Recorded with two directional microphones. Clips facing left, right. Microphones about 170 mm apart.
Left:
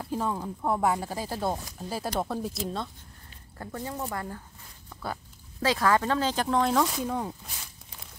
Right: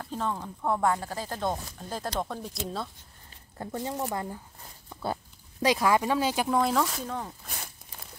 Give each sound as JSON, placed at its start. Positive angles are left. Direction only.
{"t": 0.0, "sound": "speech", "side_deg": 10}
{"t": 3.5, "sound": "speech", "side_deg": -20}
{"t": 6.8, "sound": "speech", "side_deg": 15}